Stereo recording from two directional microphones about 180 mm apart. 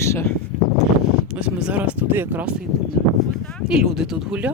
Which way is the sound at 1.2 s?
5° right (ahead or behind).